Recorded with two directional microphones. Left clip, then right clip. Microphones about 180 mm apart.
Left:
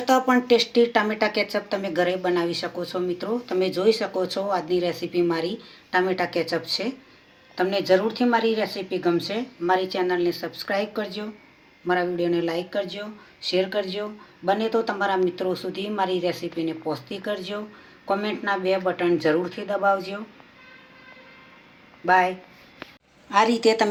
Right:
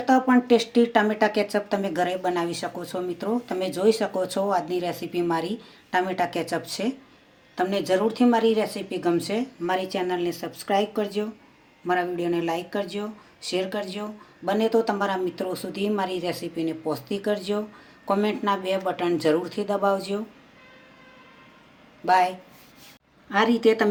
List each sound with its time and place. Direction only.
0.0 s a woman's voice: 45° right (ahead or behind)
22.0 s speech: 50° right (ahead or behind)
23.3 s speech: 35° right (ahead or behind)